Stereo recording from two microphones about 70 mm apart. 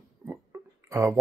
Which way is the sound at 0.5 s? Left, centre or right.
Right.